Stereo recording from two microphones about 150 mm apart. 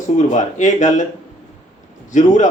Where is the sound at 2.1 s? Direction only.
55° left (ahead or behind).